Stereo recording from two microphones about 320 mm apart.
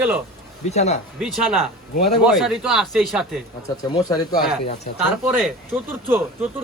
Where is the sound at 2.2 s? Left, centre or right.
Centre.